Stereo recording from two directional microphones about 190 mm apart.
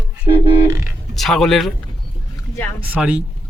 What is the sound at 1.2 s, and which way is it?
Speech, centre (ahead or behind).